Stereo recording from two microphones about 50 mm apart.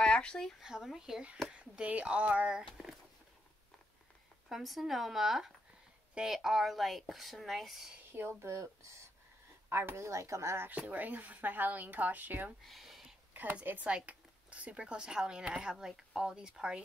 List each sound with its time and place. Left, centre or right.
0.0 s a sound: centre
0.6 s a woman's voice: centre
1.5 s speech: right
4.5 s speech: centre
8.1 s speech: right
8.5 s speech: right
9.7 s speech: right
10.9 s speech: right
12.6 s a sound: centre
13.3 s a sound: right
13.8 s a woman's voice: right